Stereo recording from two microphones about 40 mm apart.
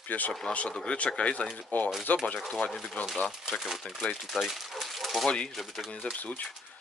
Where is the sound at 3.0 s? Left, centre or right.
Left.